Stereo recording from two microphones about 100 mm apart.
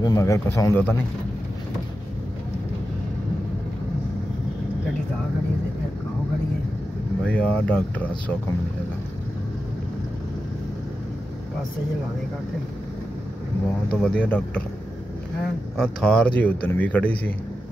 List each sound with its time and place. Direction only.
0.0 s a man's voice: 35° left (ahead or behind)
7.2 s a man's voice: 10° left (ahead or behind)
14.0 s a man's voice: 10° left (ahead or behind)
15.8 s a man's voice: 5° left (ahead or behind)